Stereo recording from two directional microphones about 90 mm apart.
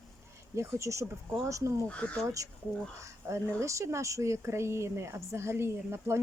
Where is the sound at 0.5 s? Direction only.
30° right (ahead or behind).